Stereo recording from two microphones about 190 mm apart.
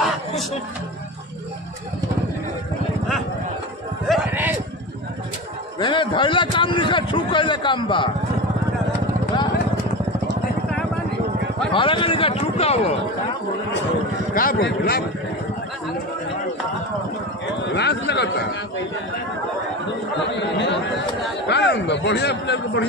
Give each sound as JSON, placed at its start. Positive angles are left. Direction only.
{"t": 4.1, "sound": "a sound", "side_deg": -10}
{"t": 5.8, "sound": "a man's voice", "side_deg": 25}
{"t": 11.7, "sound": "a man's voice", "side_deg": 25}
{"t": 14.3, "sound": "speech", "side_deg": 50}
{"t": 17.6, "sound": "speech", "side_deg": 65}
{"t": 20.3, "sound": "a man's voice", "side_deg": 70}